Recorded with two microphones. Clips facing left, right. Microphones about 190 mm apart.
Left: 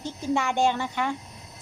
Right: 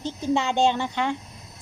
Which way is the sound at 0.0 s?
20° right (ahead or behind).